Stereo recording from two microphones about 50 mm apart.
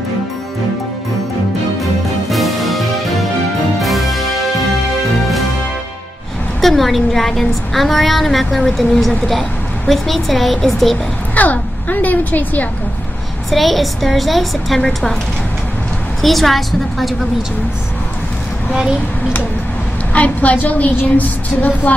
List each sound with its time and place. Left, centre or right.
2.3 s music: centre
6.6 s a woman's voice: centre
11.3 s a woman's voice: left
13.5 s a woman's voice: centre
16.2 s a woman's voice: centre
18.7 s speech: centre
20.1 s a woman's voice: left